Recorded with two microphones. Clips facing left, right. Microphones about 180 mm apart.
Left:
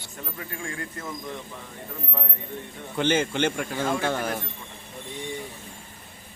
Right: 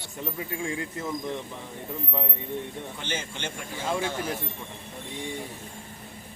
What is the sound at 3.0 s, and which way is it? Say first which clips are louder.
A man's voice: left 14 dB; 65° left (ahead or behind).